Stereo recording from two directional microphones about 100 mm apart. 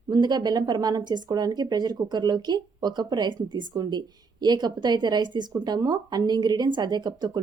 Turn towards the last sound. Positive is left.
turn(degrees=-45)  # may be behind; listen again after turning